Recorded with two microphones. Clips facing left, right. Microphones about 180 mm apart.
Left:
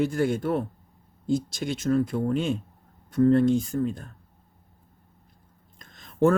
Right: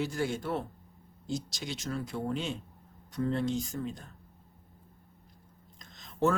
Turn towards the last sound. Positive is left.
turn(degrees=55)  # may be behind; listen again after turning